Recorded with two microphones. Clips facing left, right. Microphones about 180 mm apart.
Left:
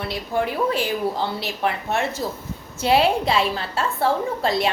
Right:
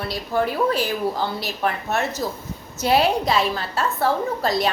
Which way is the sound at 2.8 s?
30° left (ahead or behind).